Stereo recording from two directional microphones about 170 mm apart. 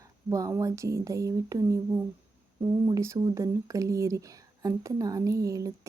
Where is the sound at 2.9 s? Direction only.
20° right (ahead or behind).